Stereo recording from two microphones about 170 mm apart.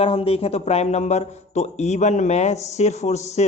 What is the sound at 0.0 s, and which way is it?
A man's voice, 35° left (ahead or behind).